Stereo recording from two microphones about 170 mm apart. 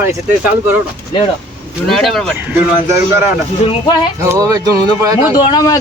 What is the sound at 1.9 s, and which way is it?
Speech, centre (ahead or behind).